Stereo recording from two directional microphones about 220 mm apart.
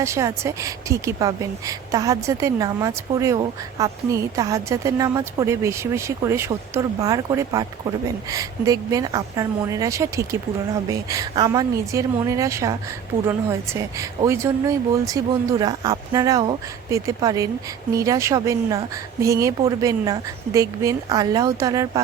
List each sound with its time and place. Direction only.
0.0 s a woman's voice: 15° right (ahead or behind)